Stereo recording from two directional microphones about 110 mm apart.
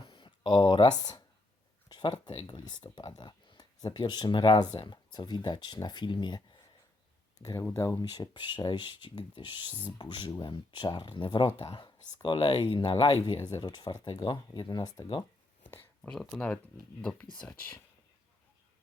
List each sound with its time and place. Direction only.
0.0 s speech: 45° left (ahead or behind)
7.6 s speech: 25° left (ahead or behind)
16.0 s speech: 5° left (ahead or behind)
17.0 s speech: 10° left (ahead or behind)